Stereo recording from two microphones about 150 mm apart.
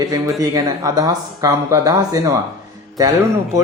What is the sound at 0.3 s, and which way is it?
Speech, 25° right (ahead or behind).